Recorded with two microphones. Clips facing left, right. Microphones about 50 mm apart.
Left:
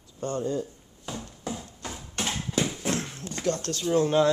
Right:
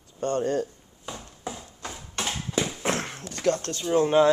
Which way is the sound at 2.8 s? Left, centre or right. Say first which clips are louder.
Right 2 dB; right.